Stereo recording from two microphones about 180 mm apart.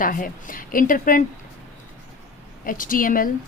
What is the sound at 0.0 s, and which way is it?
A woman's voice, 50° left (ahead or behind).